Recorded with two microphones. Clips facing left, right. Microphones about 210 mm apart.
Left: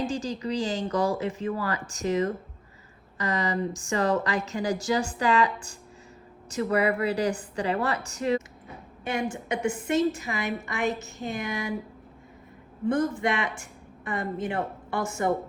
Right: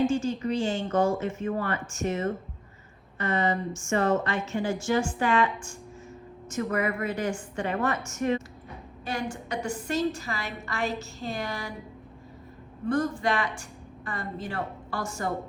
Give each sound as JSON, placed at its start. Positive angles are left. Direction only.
{"t": 0.0, "sound": "a woman's voice", "side_deg": 35}
{"t": 6.7, "sound": "a woman's voice", "side_deg": 35}
{"t": 9.0, "sound": "a woman's voice", "side_deg": 20}
{"t": 12.9, "sound": "a woman's voice", "side_deg": 20}